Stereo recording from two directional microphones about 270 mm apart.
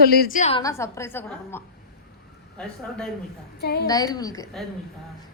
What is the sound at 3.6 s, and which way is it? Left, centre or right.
Speech, left.